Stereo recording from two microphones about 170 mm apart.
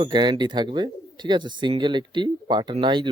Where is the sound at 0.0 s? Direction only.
25° right (ahead or behind).